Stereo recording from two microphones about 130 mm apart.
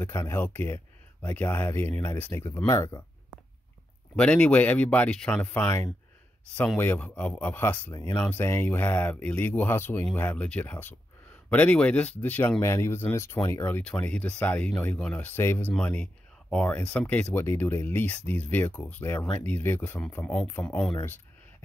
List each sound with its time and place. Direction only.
0.0 s speech: 20° left (ahead or behind)
4.2 s speech: 10° left (ahead or behind)